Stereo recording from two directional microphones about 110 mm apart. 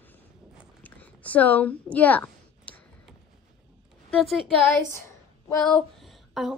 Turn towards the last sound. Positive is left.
turn(degrees=-5)  # may be behind; listen again after turning